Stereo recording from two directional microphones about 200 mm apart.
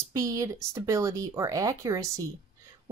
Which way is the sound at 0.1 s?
15° right (ahead or behind).